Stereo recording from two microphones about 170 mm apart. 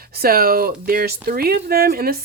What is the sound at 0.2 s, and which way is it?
Speech, 60° right (ahead or behind).